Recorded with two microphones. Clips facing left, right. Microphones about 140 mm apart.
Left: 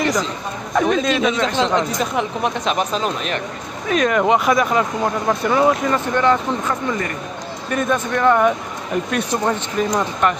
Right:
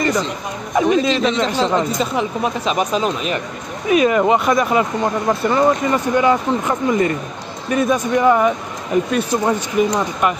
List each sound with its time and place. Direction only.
0.0 s chatter: centre (ahead or behind)
0.7 s speech: 5° right (ahead or behind)
5.9 s speech: 10° right (ahead or behind)
7.7 s speech: 10° right (ahead or behind)